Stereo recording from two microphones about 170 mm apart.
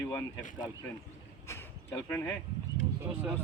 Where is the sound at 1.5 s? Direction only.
15° left (ahead or behind).